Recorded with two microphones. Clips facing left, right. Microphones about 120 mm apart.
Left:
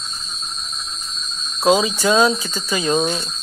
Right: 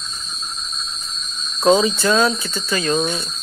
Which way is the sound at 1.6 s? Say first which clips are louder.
Right 1 dB; 5° left (ahead or behind).